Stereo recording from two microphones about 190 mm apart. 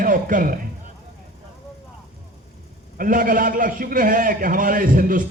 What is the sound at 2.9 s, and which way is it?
A man's voice, 45° right (ahead or behind).